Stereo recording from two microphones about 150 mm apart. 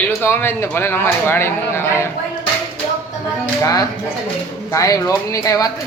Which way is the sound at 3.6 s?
20° left (ahead or behind).